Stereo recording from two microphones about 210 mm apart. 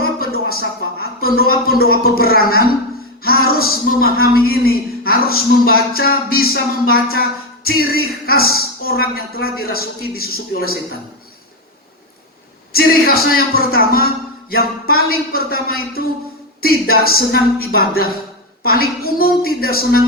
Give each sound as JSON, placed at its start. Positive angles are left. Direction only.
{"t": 0.0, "sound": "a sound", "side_deg": 45}
{"t": 1.8, "sound": "a woman's voice", "side_deg": 45}
{"t": 12.7, "sound": "a woman's voice", "side_deg": 45}